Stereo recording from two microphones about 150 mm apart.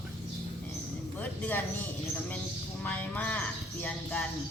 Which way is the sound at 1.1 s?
10° left (ahead or behind).